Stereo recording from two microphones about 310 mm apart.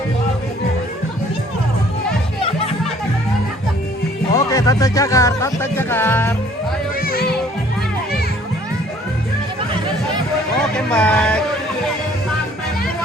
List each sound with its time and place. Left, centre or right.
4.4 s music: centre
6.9 s music: left
10.8 s speech: centre